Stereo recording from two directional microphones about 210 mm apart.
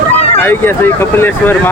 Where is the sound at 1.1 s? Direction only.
10° left (ahead or behind).